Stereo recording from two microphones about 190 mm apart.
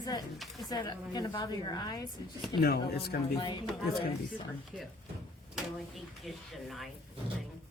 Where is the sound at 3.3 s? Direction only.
25° left (ahead or behind).